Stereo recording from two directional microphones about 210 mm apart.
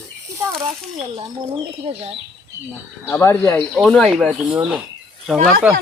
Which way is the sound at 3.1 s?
15° left (ahead or behind).